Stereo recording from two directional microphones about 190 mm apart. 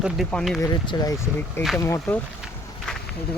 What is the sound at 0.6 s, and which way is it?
Speech, 20° left (ahead or behind).